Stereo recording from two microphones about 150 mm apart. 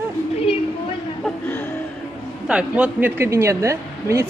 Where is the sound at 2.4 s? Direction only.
5° right (ahead or behind).